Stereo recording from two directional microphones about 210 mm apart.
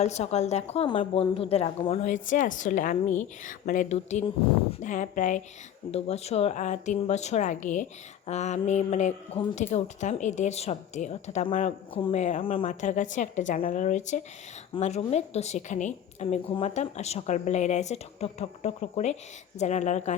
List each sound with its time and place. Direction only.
0.0 s a woman's voice: 30° left (ahead or behind)